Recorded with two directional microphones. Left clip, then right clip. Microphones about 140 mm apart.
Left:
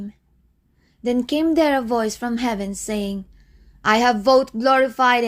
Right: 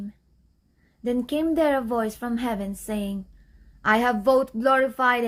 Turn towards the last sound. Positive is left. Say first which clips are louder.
# left 5 dB
turn(degrees=35)  # may be behind; listen again after turning